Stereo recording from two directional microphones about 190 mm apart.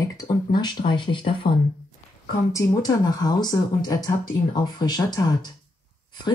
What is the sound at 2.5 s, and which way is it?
Speech, 15° left (ahead or behind).